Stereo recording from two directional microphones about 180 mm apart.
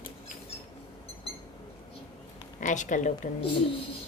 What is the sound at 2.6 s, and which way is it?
Speech, 45° left (ahead or behind).